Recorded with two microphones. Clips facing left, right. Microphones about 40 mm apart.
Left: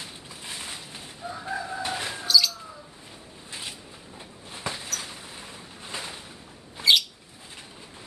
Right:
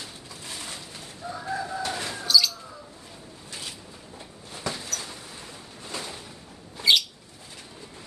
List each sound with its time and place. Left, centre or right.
0.4 s mechanisms: centre
1.3 s chicken: centre
2.2 s basketball bounce: centre
4.5 s a sound: left
6.8 s bird: centre